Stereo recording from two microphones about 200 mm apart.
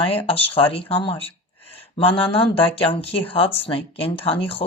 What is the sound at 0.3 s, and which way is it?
Speech, 30° left (ahead or behind).